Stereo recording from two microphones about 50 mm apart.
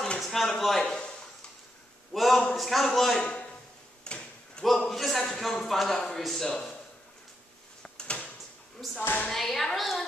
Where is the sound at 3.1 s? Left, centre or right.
Left.